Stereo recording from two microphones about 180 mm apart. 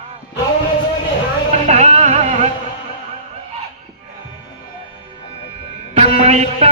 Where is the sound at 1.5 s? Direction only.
40° right (ahead or behind).